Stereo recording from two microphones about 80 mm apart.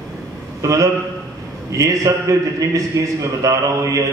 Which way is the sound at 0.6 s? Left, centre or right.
Right.